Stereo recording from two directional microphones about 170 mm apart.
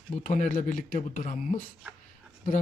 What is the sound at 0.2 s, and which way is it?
Speech, 50° left (ahead or behind).